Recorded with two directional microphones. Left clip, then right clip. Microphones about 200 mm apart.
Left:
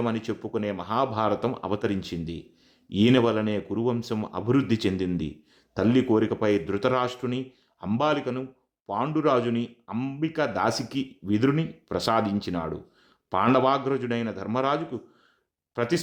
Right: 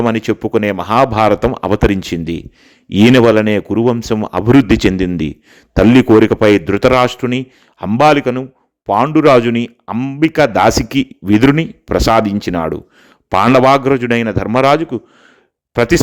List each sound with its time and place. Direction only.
0.0 s speech: 45° right (ahead or behind)
10.2 s speech: 45° right (ahead or behind)